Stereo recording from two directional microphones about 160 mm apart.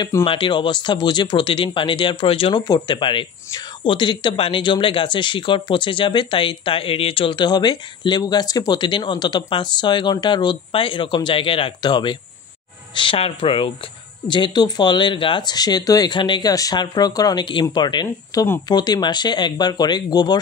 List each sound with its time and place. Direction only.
0.0 s speech: 30° left (ahead or behind)